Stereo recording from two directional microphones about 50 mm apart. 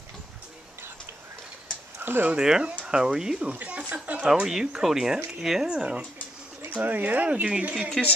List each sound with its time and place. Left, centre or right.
2.0 s a sound: right
2.3 s speech: centre
3.5 s speech: right
4.2 s speech: centre
5.7 s speech: centre
6.8 s speech: right
8.0 s speech: centre